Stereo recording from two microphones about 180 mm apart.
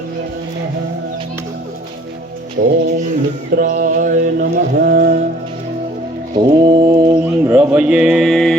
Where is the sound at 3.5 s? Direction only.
55° right (ahead or behind).